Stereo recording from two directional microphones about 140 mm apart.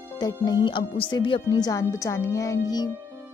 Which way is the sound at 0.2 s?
30° left (ahead or behind).